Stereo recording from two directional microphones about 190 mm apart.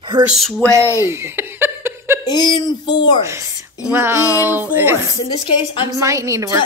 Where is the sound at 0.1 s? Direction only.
25° right (ahead or behind).